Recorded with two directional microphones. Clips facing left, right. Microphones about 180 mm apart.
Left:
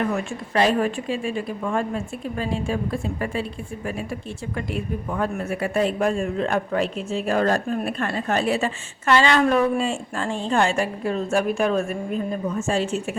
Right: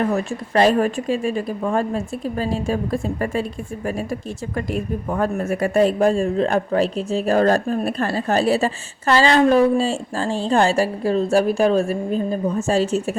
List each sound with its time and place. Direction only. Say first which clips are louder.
0.0 s speech: right 4 dB; 40° right (ahead or behind)